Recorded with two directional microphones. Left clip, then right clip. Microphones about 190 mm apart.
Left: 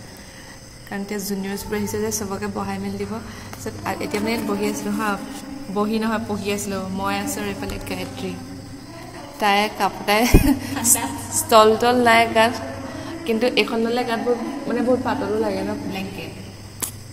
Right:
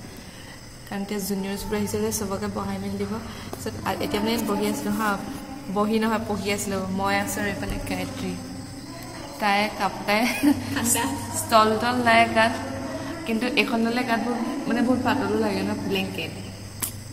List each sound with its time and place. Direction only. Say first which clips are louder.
0.9 s a woman's voice: left 2 dB; 5° left (ahead or behind)
3.8 s a woman's voice: left 1 dB; centre (ahead or behind); by 8.3 s 20° left (ahead or behind)
9.4 s a woman's voice: left 4 dB; 35° left (ahead or behind); by 15.6 s 15° left (ahead or behind)